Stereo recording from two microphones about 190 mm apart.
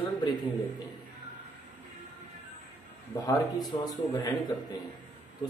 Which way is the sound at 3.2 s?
20° left (ahead or behind).